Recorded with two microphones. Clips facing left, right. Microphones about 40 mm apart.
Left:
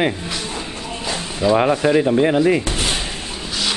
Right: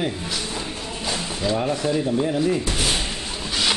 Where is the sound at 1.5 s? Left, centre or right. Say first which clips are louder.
Left 8 dB; left.